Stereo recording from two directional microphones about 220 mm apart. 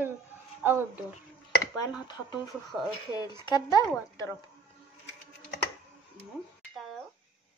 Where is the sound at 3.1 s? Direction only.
20° left (ahead or behind).